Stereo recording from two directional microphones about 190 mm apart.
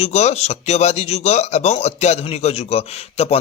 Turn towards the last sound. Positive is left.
turn(degrees=35)  # may be behind; listen again after turning